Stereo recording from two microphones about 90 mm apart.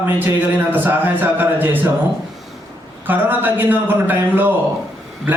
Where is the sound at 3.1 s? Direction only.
20° right (ahead or behind).